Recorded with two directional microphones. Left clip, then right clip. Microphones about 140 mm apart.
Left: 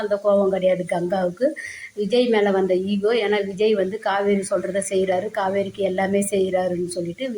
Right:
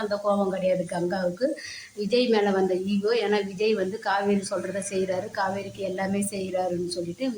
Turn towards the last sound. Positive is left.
turn(degrees=20)  # may be behind; listen again after turning